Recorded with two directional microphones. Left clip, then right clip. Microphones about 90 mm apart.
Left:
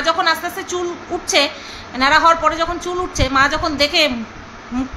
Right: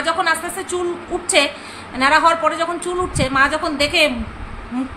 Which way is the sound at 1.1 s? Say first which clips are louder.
Even; 10° left (ahead or behind).